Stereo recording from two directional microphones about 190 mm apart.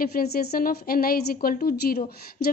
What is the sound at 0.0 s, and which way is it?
Speech, 55° left (ahead or behind).